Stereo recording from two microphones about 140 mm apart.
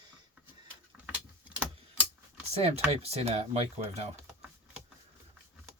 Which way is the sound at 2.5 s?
45° right (ahead or behind).